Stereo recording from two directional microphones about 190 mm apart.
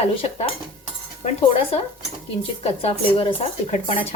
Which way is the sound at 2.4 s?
30° left (ahead or behind).